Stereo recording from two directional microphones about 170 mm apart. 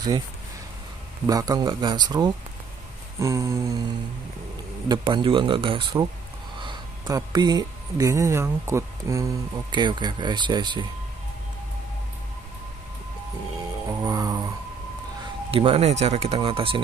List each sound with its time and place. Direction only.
1.2 s speech: 20° right (ahead or behind)
3.2 s a sound: 15° right (ahead or behind)
4.8 s speech: 30° right (ahead or behind)
13.8 s music: 20° right (ahead or behind)
15.5 s speech: 35° right (ahead or behind)